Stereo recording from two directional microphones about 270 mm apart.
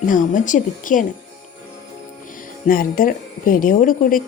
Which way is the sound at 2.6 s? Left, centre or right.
Left.